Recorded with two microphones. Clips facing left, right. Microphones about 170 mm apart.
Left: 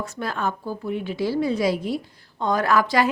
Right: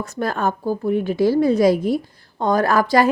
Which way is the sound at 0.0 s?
45° right (ahead or behind).